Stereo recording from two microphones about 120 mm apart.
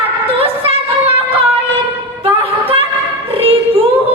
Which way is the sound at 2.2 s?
50° right (ahead or behind).